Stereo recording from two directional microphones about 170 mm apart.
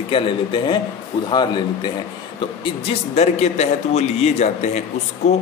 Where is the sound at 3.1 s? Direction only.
40° left (ahead or behind).